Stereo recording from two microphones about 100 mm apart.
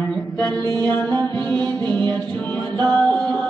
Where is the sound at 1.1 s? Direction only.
45° right (ahead or behind).